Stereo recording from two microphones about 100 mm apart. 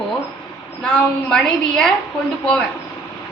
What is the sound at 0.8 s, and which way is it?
A woman's voice, 15° left (ahead or behind).